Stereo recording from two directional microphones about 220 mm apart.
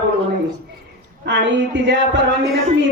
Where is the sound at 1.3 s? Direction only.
55° right (ahead or behind).